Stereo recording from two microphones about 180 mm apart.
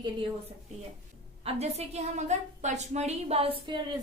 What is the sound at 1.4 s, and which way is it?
A woman's voice, 35° right (ahead or behind).